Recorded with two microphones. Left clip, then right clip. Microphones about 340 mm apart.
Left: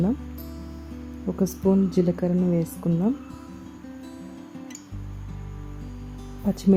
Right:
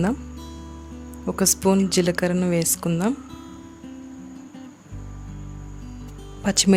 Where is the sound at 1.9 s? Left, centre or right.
Right.